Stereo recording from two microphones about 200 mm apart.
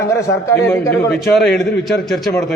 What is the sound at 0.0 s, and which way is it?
Speech, 15° left (ahead or behind).